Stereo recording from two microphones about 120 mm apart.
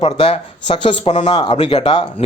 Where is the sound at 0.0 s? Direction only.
50° left (ahead or behind).